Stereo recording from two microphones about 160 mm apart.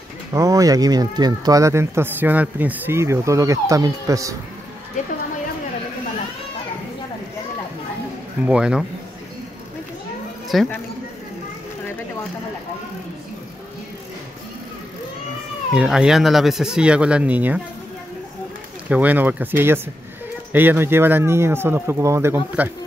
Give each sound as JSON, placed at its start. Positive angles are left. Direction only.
{"t": 0.3, "sound": "speech", "side_deg": -20}
{"t": 8.5, "sound": "speech", "side_deg": -5}
{"t": 10.5, "sound": "speech", "side_deg": 0}
{"t": 15.7, "sound": "speech", "side_deg": -5}
{"t": 18.9, "sound": "speech", "side_deg": -10}